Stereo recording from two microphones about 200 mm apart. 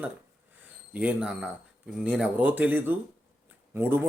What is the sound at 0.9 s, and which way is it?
Speech, 5° right (ahead or behind).